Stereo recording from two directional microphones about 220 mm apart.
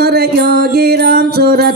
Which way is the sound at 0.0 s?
45° right (ahead or behind).